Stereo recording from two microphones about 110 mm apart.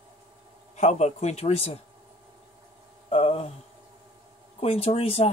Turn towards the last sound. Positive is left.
turn(degrees=65)  # may be behind; listen again after turning